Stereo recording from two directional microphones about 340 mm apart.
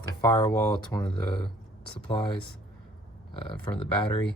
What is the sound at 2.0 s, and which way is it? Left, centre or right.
Speech, centre.